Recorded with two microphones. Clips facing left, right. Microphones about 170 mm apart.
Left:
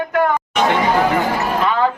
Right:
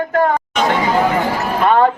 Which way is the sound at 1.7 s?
50° right (ahead or behind).